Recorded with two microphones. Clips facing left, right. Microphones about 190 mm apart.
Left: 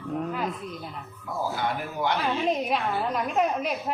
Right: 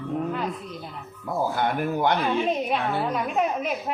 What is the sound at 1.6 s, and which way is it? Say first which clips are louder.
Speech: right 5 dB; 55° right (ahead or behind).